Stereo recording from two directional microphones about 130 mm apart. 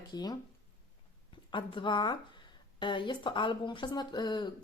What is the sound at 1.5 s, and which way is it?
Speech, 40° left (ahead or behind).